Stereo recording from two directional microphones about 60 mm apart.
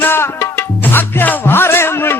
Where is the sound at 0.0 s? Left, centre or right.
Left.